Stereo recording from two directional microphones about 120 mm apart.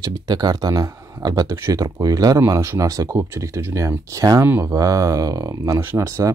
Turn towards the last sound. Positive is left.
turn(degrees=-25)  # may be behind; listen again after turning